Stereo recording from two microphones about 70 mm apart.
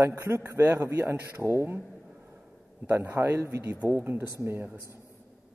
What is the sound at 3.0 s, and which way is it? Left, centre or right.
A man's voice, right.